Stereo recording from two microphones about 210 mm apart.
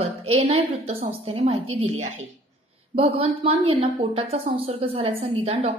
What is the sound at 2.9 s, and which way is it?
A woman's voice, 25° right (ahead or behind).